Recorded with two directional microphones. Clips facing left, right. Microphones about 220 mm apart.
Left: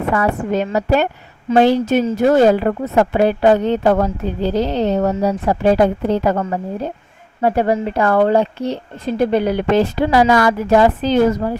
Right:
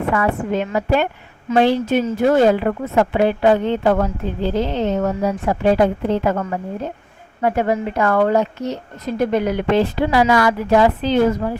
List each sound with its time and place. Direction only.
0.1 s speech: 40° left (ahead or behind)